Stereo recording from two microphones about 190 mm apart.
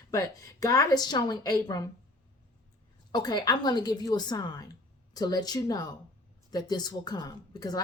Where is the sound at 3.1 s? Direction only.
20° left (ahead or behind).